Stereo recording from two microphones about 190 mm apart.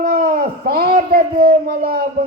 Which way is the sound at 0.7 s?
55° right (ahead or behind).